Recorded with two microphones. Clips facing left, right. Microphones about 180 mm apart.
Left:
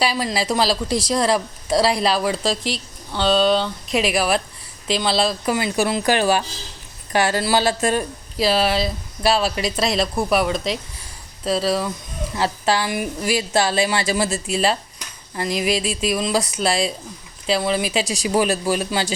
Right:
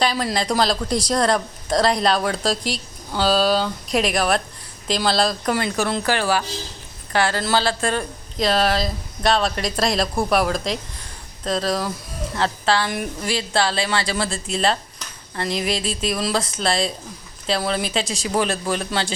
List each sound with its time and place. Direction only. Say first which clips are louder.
0.0 s speech: even; 5° left (ahead or behind)
8.4 s speech: left 1 dB; 5° left (ahead or behind)
14.5 s a sound: left 1 dB; 5° left (ahead or behind)
16.0 s speech: left 2 dB; 5° left (ahead or behind)
18.1 s speech: left 4 dB; 15° left (ahead or behind)